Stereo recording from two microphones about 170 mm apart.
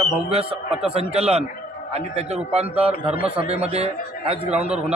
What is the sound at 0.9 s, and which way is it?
A man's voice, 35° right (ahead or behind).